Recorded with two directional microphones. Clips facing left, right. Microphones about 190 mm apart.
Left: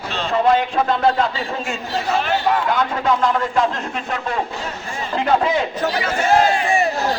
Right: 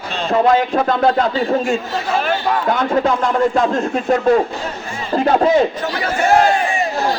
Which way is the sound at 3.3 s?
45° right (ahead or behind).